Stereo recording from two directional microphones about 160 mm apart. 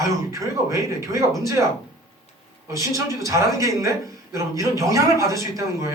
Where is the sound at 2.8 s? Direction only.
20° right (ahead or behind).